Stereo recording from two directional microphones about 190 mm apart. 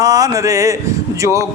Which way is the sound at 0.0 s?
20° right (ahead or behind).